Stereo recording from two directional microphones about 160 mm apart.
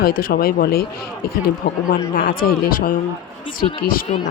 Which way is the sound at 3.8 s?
60° left (ahead or behind).